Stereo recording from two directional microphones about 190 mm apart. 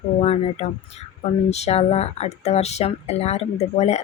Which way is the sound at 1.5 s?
35° left (ahead or behind).